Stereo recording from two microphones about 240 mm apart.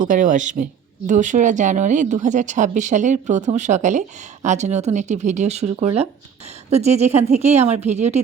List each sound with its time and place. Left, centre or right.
0.0 s speech: right